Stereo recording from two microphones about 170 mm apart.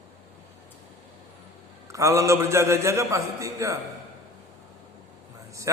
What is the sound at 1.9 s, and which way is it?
A man's voice, 15° right (ahead or behind).